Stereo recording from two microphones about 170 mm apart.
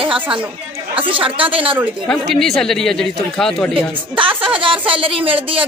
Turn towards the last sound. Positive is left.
turn(degrees=-30)  # may be behind; listen again after turning